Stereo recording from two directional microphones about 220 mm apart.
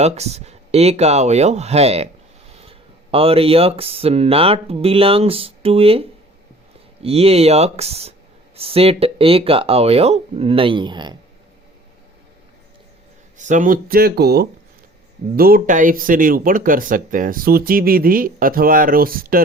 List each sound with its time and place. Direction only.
0.0 s speech: 30° right (ahead or behind)
13.4 s speech: 35° right (ahead or behind)